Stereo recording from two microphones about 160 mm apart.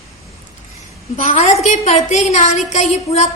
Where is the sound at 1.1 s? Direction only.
55° left (ahead or behind).